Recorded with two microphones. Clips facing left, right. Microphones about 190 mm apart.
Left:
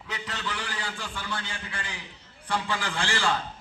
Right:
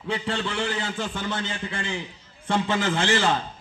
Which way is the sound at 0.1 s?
30° right (ahead or behind).